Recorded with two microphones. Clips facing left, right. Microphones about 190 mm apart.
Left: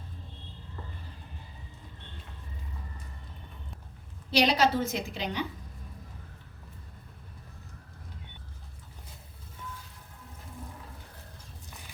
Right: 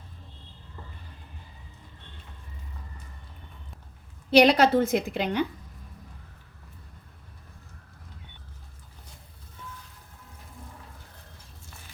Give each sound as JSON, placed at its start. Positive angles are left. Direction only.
{"t": 4.3, "sound": "a woman's voice", "side_deg": -55}